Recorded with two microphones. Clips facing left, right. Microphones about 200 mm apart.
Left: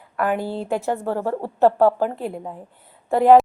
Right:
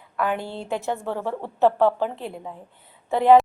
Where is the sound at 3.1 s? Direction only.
40° left (ahead or behind).